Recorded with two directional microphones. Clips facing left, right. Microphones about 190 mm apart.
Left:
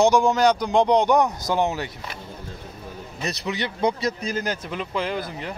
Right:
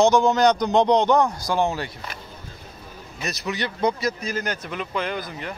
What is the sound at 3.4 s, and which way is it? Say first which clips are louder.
Speech: even; 20° left (ahead or behind).